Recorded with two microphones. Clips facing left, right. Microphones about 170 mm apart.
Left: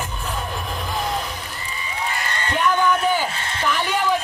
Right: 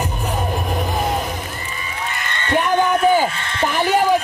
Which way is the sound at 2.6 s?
45° right (ahead or behind).